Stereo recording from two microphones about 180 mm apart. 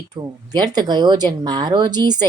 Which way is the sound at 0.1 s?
20° right (ahead or behind).